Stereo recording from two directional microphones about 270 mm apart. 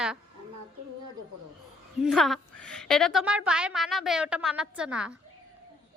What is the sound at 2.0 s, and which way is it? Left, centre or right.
A woman's voice, centre.